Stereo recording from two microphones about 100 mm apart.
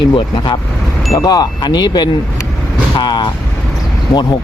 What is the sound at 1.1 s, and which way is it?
Speech, 35° left (ahead or behind).